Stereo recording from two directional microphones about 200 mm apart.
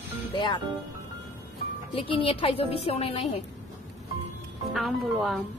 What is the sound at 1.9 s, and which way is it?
Speech, 25° left (ahead or behind).